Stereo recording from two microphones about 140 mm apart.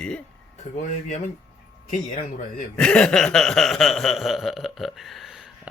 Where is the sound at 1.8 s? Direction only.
60° left (ahead or behind).